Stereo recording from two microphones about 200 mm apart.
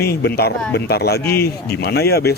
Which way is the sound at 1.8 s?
50° left (ahead or behind).